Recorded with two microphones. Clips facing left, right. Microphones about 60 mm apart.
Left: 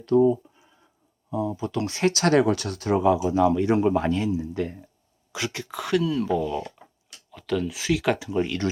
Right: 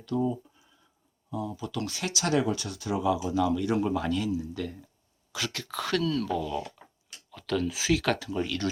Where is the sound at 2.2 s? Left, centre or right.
Left.